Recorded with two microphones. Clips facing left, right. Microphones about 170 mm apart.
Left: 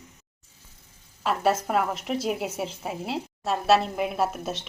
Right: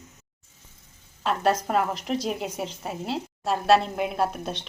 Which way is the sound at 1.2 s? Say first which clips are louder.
Even; 5° left (ahead or behind).